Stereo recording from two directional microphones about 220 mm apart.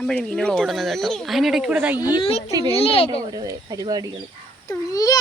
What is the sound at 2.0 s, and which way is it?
Speech, 25° left (ahead or behind).